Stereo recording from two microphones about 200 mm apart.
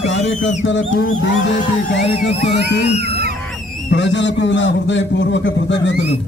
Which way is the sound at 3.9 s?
65° left (ahead or behind).